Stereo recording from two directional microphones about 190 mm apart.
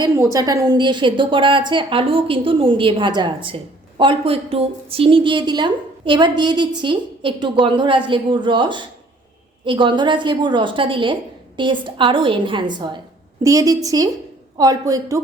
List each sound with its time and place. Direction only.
0.3 s a woman's voice: 20° right (ahead or behind)